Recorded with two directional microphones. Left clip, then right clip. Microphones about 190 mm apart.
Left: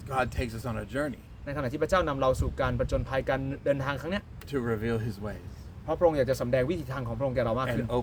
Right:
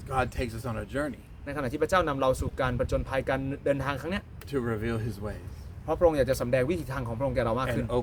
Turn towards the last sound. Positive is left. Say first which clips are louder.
# even
turn(degrees=5)  # may be behind; listen again after turning